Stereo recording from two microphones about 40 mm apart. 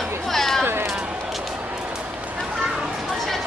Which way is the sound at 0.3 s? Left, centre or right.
Centre.